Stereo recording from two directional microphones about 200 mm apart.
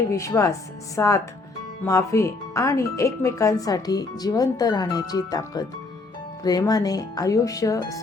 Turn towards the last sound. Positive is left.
turn(degrees=15)  # may be behind; listen again after turning